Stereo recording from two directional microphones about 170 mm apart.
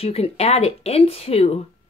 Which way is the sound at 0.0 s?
35° left (ahead or behind).